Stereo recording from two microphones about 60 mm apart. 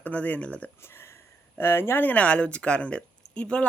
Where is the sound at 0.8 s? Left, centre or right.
Left.